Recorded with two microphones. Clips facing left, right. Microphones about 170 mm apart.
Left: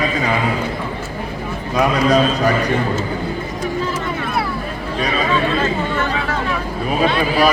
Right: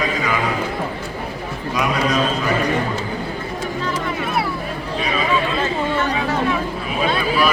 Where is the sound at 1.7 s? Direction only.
35° left (ahead or behind).